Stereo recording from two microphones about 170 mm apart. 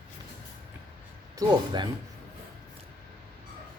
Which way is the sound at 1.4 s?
25° right (ahead or behind).